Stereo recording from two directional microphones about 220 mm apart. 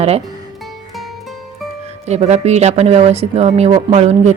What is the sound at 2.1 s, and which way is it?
Speech, 30° right (ahead or behind).